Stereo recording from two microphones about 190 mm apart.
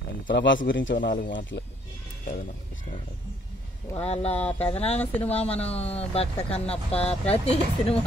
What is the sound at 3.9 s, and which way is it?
Speech, 30° left (ahead or behind).